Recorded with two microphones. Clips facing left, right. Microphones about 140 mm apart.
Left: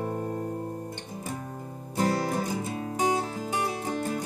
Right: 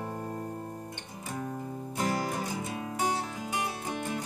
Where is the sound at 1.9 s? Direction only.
40° left (ahead or behind).